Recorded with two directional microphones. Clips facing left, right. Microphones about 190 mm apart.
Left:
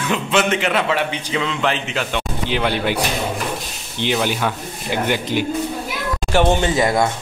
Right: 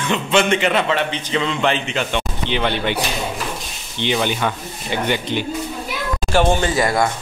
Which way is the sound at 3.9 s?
5° left (ahead or behind).